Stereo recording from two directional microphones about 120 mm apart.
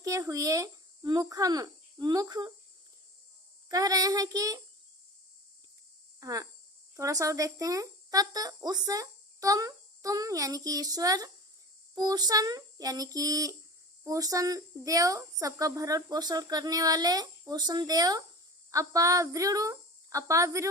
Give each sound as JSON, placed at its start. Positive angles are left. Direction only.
{"t": 0.0, "sound": "speech", "side_deg": -30}
{"t": 3.7, "sound": "speech", "side_deg": -30}
{"t": 6.1, "sound": "speech", "side_deg": -30}